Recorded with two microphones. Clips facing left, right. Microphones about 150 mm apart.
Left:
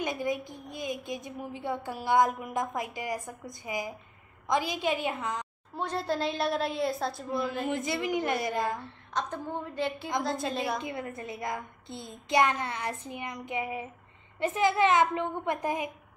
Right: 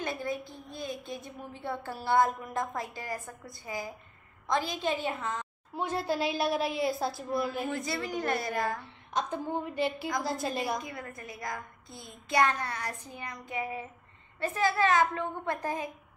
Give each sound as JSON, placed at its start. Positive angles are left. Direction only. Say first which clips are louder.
{"t": 0.0, "sound": "a woman's voice", "louder": "left 3 dB", "side_deg": 15}
{"t": 5.8, "sound": "a woman's voice", "louder": "even", "side_deg": -5}
{"t": 7.6, "sound": "a woman's voice", "louder": "left 3 dB", "side_deg": 20}
{"t": 9.1, "sound": "a woman's voice", "louder": "right 2 dB", "side_deg": -10}
{"t": 9.9, "sound": "a woman's voice", "louder": "left 1 dB", "side_deg": 25}
{"t": 10.2, "sound": "a woman's voice", "louder": "left 1 dB", "side_deg": -5}
{"t": 10.8, "sound": "a woman's voice", "louder": "left 5 dB", "side_deg": 25}